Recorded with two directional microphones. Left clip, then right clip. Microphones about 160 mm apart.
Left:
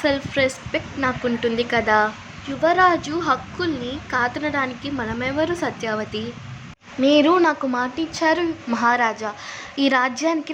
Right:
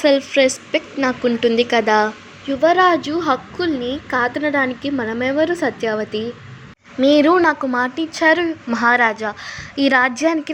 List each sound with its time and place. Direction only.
0.0 s speech: 15° right (ahead or behind)
7.0 s a woman's voice: 30° right (ahead or behind)